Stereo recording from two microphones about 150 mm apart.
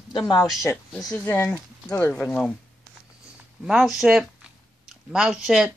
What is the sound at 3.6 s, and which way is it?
Speech, 5° right (ahead or behind).